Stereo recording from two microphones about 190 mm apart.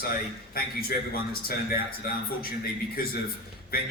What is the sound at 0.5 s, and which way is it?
A man's voice, 50° left (ahead or behind).